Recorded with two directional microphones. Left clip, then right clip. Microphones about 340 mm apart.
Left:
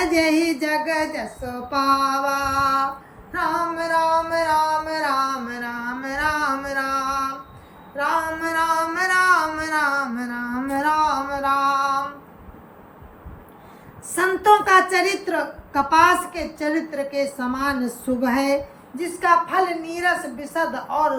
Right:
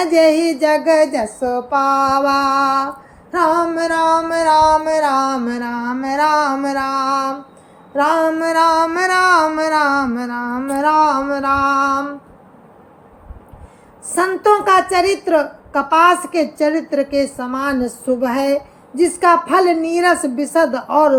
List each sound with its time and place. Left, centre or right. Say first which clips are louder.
0.0 s female singing: right 7 dB; centre
14.2 s female singing: right 2 dB; centre